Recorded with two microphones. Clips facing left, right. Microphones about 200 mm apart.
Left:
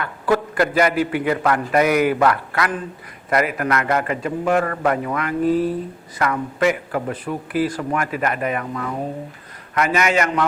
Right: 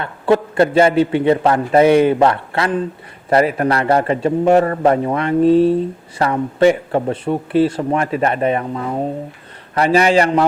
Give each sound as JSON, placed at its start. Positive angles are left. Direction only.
{"t": 0.0, "sound": "a man's voice", "side_deg": -25}